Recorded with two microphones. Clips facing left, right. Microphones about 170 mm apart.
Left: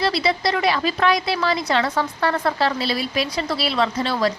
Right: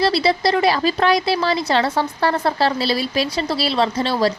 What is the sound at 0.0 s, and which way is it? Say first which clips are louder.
A woman's voice: right 4 dB; 35° right (ahead or behind).